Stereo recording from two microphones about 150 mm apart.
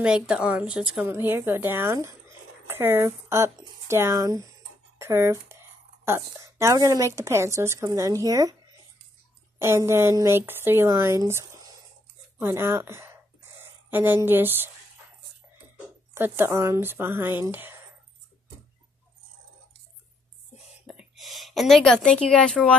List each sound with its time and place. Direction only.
0.0 s speech: 5° right (ahead or behind); by 8.5 s 25° right (ahead or behind)
9.6 s speech: 15° right (ahead or behind)
16.2 s speech: 15° right (ahead or behind)
20.5 s whispering: 5° right (ahead or behind)